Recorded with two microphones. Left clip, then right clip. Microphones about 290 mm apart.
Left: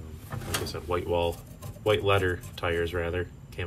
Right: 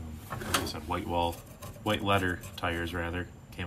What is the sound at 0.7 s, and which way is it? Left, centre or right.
Speech, centre.